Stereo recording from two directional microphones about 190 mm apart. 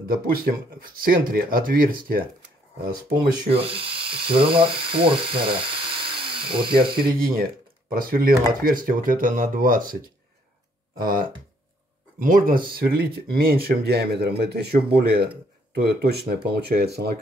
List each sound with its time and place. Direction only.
0.1 s speech: 50° right (ahead or behind)
3.5 s speech: 30° right (ahead or behind)
7.0 s speech: 50° right (ahead or behind)